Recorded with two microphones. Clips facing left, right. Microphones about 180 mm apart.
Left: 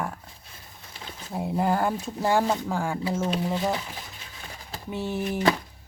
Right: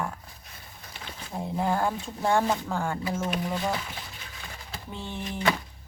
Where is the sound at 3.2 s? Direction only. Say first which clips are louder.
Left 3 dB; 30° left (ahead or behind).